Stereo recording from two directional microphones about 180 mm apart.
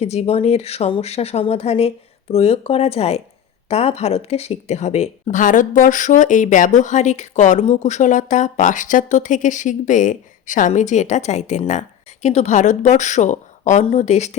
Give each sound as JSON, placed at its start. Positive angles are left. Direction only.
{"t": 0.0, "sound": "a woman's voice", "side_deg": 35}